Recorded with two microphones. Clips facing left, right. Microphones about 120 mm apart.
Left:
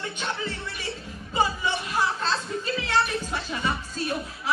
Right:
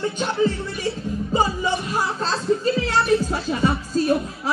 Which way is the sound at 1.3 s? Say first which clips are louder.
Right 3 dB; 35° right (ahead or behind).